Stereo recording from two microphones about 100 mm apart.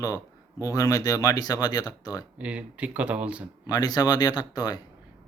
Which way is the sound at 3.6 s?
40° left (ahead or behind).